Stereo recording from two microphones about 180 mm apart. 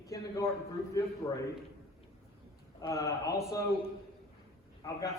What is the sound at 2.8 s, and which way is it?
Speech, 20° left (ahead or behind).